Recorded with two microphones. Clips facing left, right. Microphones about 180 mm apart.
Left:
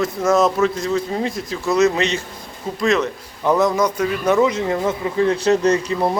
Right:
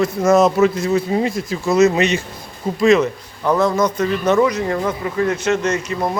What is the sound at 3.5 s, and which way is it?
Speech, 15° left (ahead or behind).